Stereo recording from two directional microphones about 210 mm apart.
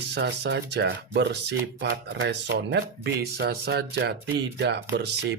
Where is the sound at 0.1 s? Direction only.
55° right (ahead or behind).